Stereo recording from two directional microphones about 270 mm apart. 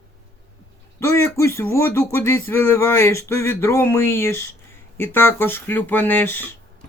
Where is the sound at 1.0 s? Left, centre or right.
Centre.